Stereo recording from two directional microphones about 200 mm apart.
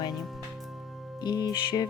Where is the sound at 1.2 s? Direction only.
20° left (ahead or behind).